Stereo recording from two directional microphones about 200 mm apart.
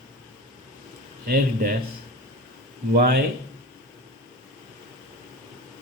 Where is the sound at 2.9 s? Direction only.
50° right (ahead or behind).